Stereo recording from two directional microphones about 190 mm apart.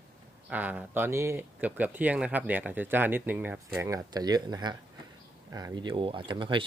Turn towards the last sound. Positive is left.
turn(degrees=-25)  # may be behind; listen again after turning